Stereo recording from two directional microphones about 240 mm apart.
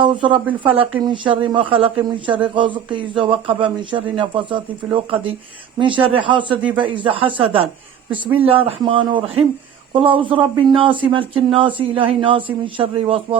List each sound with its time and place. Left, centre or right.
0.0 s speech: right